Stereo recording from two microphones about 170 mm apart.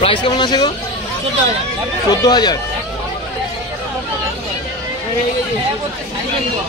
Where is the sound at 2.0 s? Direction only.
25° left (ahead or behind).